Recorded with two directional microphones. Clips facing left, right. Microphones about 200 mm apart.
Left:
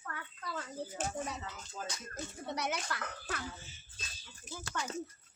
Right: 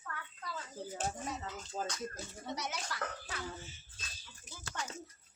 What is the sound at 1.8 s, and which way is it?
Speech, 40° right (ahead or behind).